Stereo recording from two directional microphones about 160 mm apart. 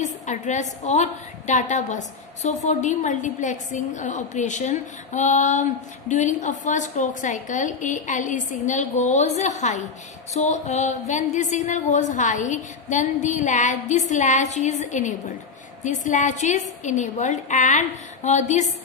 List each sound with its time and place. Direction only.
0.0 s a woman's voice: 50° left (ahead or behind)